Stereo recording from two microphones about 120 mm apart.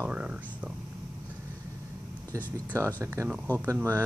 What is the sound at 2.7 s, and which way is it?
Speech, 25° right (ahead or behind).